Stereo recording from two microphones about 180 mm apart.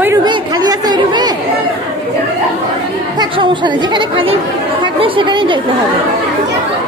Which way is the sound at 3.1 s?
25° right (ahead or behind).